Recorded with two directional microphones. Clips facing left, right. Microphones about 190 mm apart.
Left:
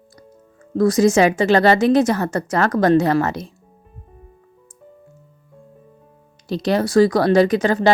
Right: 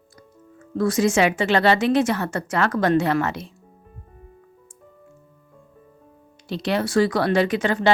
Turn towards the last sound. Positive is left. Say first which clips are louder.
# left 5 dB
turn(degrees=40)  # may be behind; listen again after turning